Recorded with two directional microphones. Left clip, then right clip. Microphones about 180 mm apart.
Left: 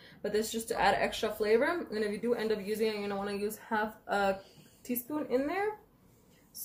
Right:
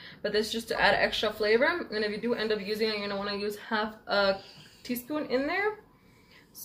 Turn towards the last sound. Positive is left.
turn(degrees=20)  # may be behind; listen again after turning